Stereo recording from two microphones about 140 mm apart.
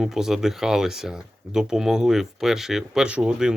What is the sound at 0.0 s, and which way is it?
Speech, 5° right (ahead or behind).